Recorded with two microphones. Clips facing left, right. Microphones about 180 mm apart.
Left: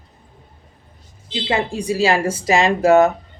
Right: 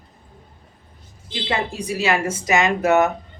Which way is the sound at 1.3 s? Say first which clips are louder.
Left 4 dB; 25° left (ahead or behind).